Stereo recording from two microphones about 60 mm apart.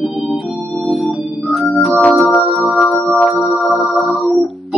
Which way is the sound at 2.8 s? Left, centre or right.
Centre.